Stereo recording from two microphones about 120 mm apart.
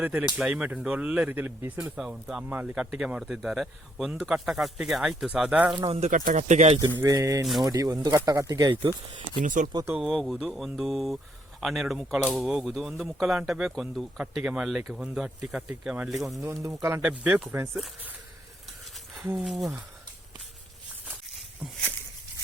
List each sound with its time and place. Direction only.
0.0 s speech: 10° right (ahead or behind)
2.0 s a man's voice: 5° right (ahead or behind)
5.7 s speech: 40° right (ahead or behind)
6.0 s speech: 90° right
6.8 s speech: 30° right (ahead or behind)
9.4 s speech: 90° right
10.0 s a man's voice: centre (ahead or behind)
16.6 s speech: 25° right (ahead or behind)
17.0 s speech: 10° right (ahead or behind)
19.4 s a man's voice: centre (ahead or behind)
21.6 s speech: 10° right (ahead or behind)